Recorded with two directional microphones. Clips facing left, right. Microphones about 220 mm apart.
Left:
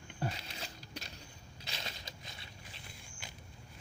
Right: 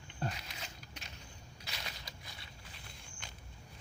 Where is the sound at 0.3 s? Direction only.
30° left (ahead or behind).